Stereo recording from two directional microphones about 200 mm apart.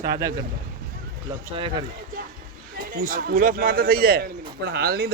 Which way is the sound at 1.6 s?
25° right (ahead or behind).